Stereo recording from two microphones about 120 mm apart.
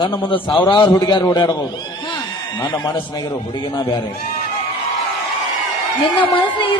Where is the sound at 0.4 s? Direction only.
40° left (ahead or behind).